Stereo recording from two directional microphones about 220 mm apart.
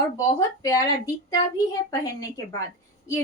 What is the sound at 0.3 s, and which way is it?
Speech, 15° left (ahead or behind).